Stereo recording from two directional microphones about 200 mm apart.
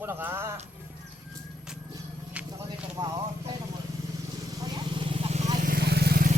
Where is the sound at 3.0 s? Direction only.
25° right (ahead or behind).